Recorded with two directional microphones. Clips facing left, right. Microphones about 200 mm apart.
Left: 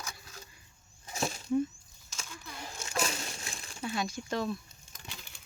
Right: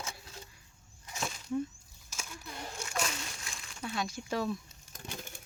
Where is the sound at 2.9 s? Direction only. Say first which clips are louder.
Left 4 dB; 35° left (ahead or behind).